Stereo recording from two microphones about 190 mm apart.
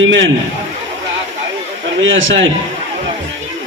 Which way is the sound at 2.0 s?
90° right.